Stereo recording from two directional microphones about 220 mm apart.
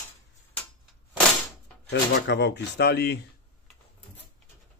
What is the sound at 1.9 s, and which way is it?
A man's voice, 50° left (ahead or behind).